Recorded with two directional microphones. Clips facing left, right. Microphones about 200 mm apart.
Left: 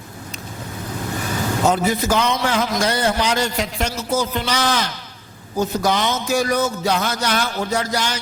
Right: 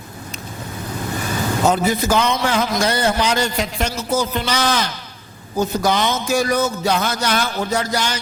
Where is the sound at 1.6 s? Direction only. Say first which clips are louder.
Right 1 dB; 30° right (ahead or behind).